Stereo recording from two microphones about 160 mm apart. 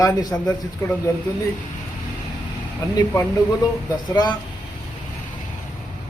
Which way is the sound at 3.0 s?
25° left (ahead or behind).